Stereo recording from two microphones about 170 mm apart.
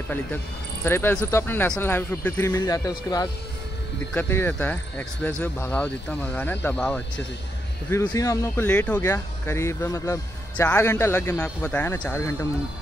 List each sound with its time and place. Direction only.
0.8 s speech: 15° left (ahead or behind)
7.9 s speech: 15° left (ahead or behind)